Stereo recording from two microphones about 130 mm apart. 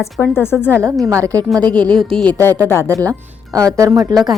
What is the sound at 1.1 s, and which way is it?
Speech, 25° right (ahead or behind).